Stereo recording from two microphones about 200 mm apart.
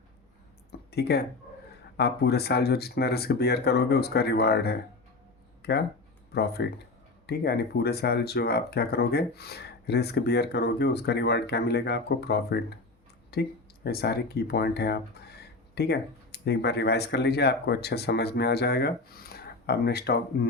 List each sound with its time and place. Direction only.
0.9 s speech: 55° left (ahead or behind)